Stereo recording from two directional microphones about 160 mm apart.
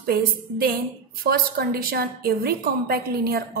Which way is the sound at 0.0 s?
70° right (ahead or behind).